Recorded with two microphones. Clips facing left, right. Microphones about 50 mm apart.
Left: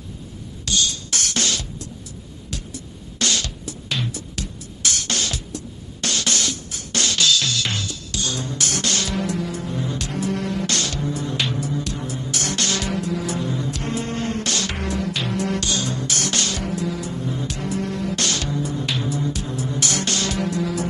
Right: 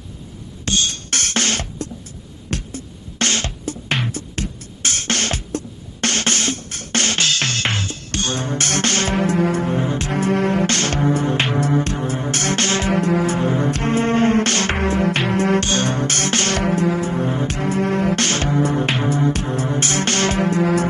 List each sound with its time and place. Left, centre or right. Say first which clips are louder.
0.7 s music: right 2 dB; right
11.5 s music: right 7 dB; right